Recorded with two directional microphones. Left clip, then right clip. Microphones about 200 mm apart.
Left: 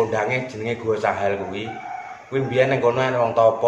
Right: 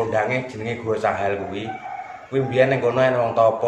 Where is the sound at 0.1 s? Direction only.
20° left (ahead or behind).